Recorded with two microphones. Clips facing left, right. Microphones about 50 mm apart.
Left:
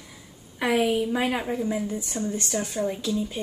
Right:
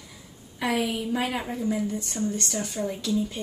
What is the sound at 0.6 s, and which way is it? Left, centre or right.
A woman's voice, centre.